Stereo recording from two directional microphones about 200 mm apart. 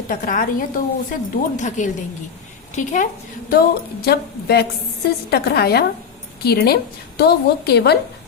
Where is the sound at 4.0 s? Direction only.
55° left (ahead or behind).